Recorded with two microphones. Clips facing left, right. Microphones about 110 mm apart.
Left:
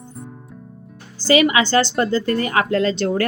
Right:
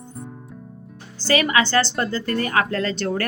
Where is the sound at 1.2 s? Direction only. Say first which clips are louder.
Left 4 dB; 15° left (ahead or behind).